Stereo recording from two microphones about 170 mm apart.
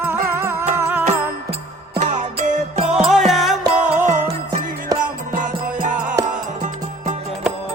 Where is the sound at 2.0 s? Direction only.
45° right (ahead or behind).